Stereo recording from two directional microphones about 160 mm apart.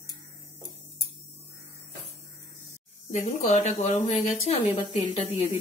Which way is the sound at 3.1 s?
50° left (ahead or behind).